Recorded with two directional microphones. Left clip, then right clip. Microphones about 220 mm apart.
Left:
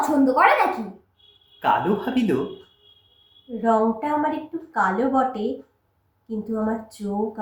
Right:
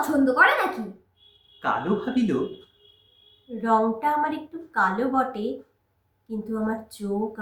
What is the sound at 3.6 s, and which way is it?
A woman's voice, 15° right (ahead or behind).